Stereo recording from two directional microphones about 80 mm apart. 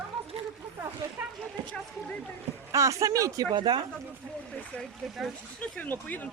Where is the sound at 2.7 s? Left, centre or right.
Right.